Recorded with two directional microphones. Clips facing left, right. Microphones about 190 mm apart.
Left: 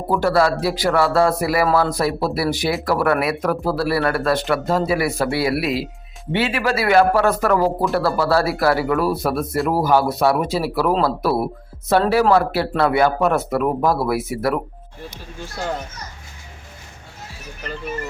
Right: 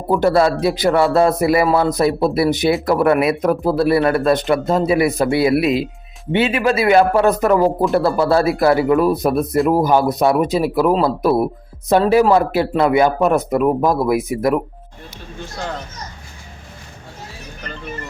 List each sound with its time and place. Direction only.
0.1 s speech: 20° right (ahead or behind)